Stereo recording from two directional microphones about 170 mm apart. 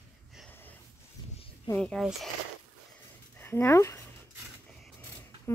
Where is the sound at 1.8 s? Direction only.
Centre (ahead or behind).